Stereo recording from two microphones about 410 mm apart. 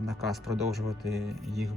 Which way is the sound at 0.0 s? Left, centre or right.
Centre.